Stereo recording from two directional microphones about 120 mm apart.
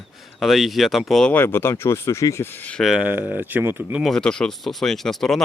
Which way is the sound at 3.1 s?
15° right (ahead or behind).